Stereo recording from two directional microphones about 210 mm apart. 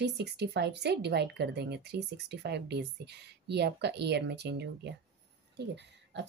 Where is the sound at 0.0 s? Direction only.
55° right (ahead or behind).